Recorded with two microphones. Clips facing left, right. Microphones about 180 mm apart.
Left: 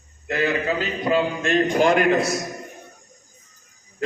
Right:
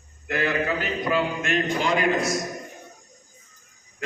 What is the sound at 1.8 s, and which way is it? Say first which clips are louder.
Speech: left 6 dB; 55° left (ahead or behind).